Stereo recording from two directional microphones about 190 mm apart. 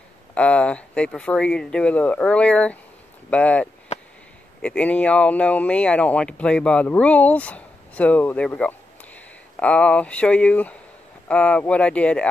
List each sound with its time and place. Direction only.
0.3 s speech: 5° left (ahead or behind)
3.9 s a sound: 35° left (ahead or behind)
4.6 s speech: 5° left (ahead or behind)